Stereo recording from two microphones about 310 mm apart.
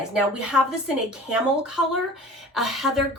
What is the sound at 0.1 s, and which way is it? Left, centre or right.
Speech, centre.